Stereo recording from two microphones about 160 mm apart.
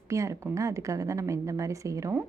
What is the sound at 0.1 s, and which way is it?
A woman's voice, 20° right (ahead or behind).